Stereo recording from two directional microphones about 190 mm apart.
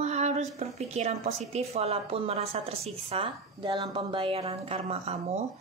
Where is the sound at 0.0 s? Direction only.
35° right (ahead or behind).